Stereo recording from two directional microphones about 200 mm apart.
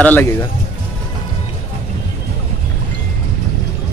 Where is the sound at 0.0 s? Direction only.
10° left (ahead or behind).